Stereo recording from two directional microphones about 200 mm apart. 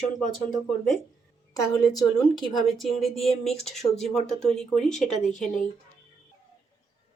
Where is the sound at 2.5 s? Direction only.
Centre (ahead or behind).